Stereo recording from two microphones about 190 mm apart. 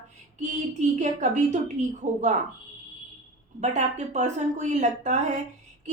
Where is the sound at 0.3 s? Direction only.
40° right (ahead or behind).